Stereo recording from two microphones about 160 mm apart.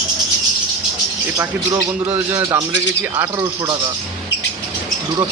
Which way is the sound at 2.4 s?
25° right (ahead or behind).